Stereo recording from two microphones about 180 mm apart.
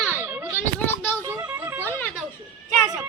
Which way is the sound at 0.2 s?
10° right (ahead or behind).